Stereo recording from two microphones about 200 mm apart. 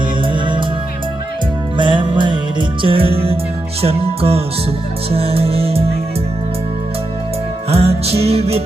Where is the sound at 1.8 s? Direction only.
25° right (ahead or behind).